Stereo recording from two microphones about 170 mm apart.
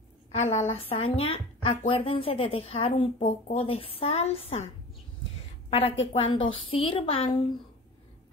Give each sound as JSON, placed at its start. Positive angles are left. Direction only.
{"t": 0.3, "sound": "speech", "side_deg": 40}
{"t": 5.7, "sound": "a woman's voice", "side_deg": 35}